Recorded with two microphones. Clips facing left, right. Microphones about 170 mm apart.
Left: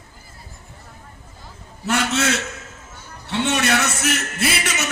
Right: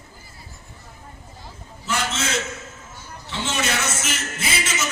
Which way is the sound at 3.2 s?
65° left (ahead or behind).